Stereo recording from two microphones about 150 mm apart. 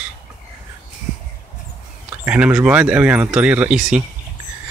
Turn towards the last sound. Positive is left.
turn(degrees=-5)  # may be behind; listen again after turning